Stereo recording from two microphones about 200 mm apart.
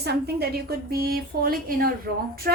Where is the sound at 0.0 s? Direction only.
55° right (ahead or behind).